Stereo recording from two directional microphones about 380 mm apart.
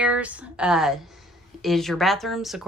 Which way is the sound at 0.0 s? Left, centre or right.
Centre.